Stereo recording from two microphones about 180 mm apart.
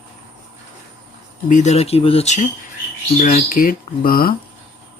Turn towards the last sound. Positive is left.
turn(degrees=55)  # may be behind; listen again after turning